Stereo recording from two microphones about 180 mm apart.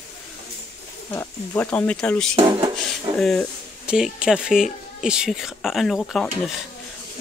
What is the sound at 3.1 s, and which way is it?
Speech, centre (ahead or behind).